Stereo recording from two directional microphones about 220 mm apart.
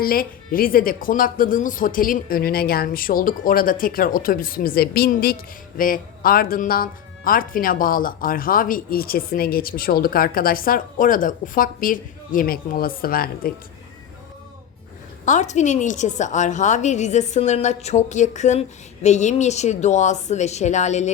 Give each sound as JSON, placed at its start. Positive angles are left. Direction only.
{"t": 0.0, "sound": "speech", "side_deg": 40}
{"t": 15.2, "sound": "speech", "side_deg": 35}